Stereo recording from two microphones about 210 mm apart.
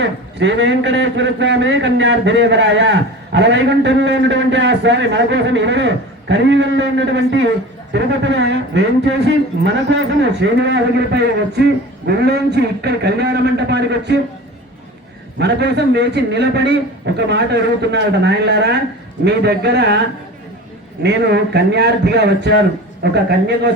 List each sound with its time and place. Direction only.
0.0 s a man's voice: 60° right (ahead or behind)
15.4 s a man's voice: 55° right (ahead or behind)
21.0 s a man's voice: 55° right (ahead or behind)